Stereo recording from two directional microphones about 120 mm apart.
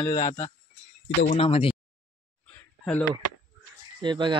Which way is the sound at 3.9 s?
40° right (ahead or behind).